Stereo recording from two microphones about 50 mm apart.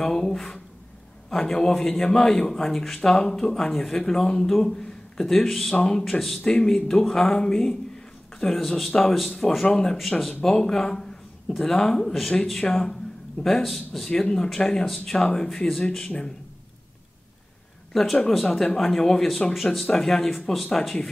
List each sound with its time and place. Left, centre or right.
0.0 s a man's voice: centre
6.4 s a man's voice: centre
14.1 s a man's voice: centre
18.3 s speech: centre